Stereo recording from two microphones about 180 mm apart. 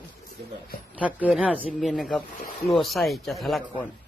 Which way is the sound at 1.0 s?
10° right (ahead or behind).